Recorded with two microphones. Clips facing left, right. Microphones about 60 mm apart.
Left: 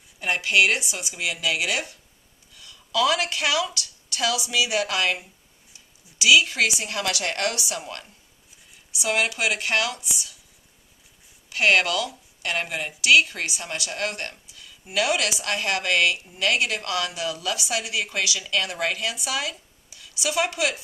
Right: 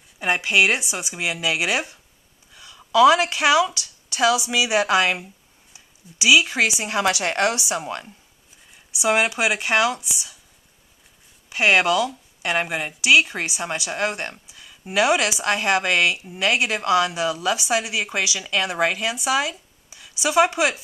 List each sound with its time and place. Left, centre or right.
0.2 s a woman's voice: centre
11.4 s a woman's voice: centre